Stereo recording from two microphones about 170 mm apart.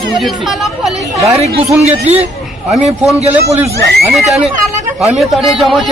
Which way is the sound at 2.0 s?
40° right (ahead or behind).